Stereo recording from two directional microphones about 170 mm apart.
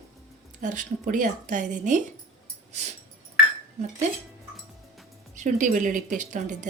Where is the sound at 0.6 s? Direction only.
50° right (ahead or behind).